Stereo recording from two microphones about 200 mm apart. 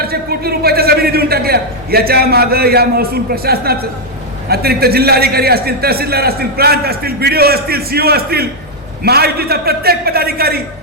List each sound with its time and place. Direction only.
0.0 s a man's voice: 50° right (ahead or behind)